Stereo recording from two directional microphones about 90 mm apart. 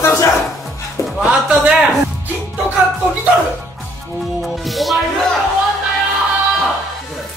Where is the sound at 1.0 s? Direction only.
30° left (ahead or behind).